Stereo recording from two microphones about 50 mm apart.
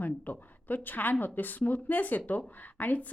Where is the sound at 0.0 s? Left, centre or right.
Left.